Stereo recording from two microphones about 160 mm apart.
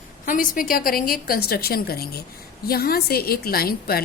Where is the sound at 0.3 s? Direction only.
60° left (ahead or behind).